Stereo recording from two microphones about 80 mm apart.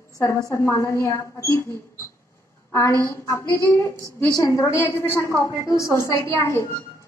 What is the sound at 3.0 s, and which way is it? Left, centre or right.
A woman's voice, left.